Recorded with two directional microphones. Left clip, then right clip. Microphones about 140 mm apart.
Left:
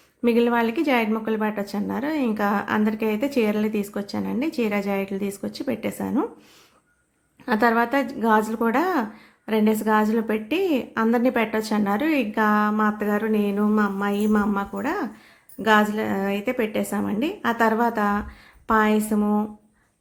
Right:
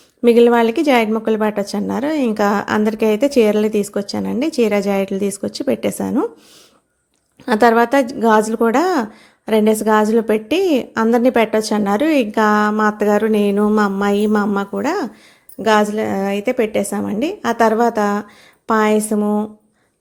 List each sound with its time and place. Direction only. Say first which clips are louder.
0.2 s a woman's voice: right 9 dB; 40° right (ahead or behind)
7.4 s a woman's voice: right 8 dB; 40° right (ahead or behind)
15.6 s a woman's voice: right 5 dB; 30° right (ahead or behind)